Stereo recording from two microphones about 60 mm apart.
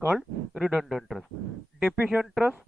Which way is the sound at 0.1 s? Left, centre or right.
Centre.